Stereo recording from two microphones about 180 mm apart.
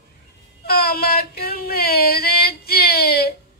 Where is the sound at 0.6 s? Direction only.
60° left (ahead or behind).